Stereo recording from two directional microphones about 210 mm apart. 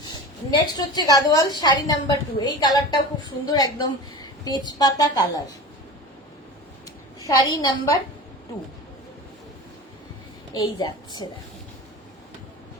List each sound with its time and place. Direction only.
0.1 s a woman's voice: 20° left (ahead or behind)
7.2 s a woman's voice: 15° left (ahead or behind)
10.5 s a woman's voice: 15° left (ahead or behind)